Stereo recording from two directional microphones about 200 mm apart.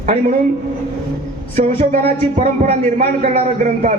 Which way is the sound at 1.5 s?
35° right (ahead or behind).